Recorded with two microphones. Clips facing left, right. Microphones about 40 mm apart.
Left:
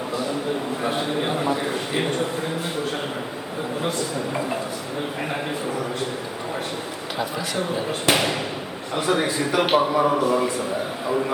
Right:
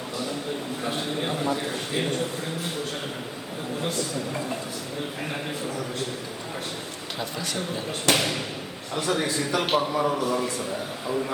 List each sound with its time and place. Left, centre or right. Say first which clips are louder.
0.9 s a man's voice: left 4 dB; centre
8.0 s a man's voice: left 2 dB; centre